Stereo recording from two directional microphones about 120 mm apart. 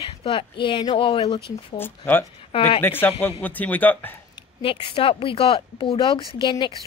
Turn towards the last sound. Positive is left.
turn(degrees=40)  # may be behind; listen again after turning